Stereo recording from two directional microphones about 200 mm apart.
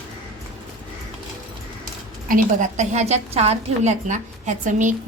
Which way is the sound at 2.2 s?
40° right (ahead or behind).